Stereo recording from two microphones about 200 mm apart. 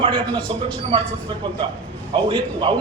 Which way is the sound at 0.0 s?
25° right (ahead or behind).